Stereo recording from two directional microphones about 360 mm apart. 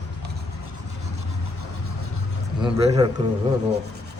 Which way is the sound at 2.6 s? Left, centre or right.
Centre.